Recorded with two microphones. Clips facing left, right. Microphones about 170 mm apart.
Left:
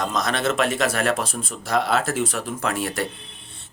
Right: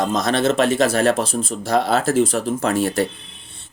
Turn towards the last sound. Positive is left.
turn(degrees=-30)  # may be behind; listen again after turning